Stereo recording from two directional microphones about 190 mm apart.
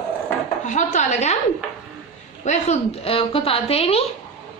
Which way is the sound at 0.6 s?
40° left (ahead or behind).